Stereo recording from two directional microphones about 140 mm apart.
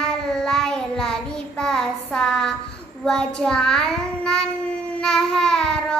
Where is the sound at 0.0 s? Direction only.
5° left (ahead or behind).